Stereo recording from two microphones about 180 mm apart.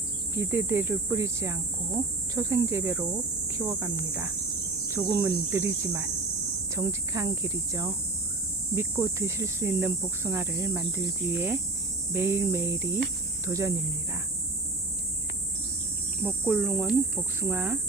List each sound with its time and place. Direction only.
0.3 s speech: 15° right (ahead or behind)
16.2 s speech: 5° right (ahead or behind)